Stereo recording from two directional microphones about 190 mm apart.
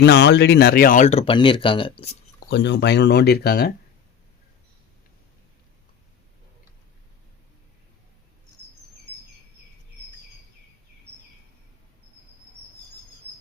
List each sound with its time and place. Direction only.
0.0 s speech: 60° left (ahead or behind); by 2.1 s 30° left (ahead or behind)
2.5 s speech: 65° left (ahead or behind)